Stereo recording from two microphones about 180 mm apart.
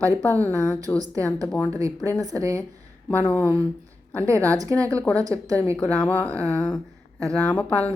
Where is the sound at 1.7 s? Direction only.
15° right (ahead or behind).